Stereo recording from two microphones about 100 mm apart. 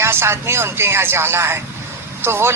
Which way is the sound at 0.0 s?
25° right (ahead or behind).